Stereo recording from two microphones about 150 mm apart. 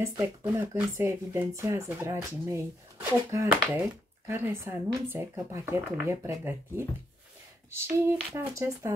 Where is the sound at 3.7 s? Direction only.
10° right (ahead or behind).